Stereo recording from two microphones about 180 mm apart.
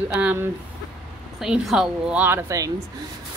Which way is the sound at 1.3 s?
Centre (ahead or behind).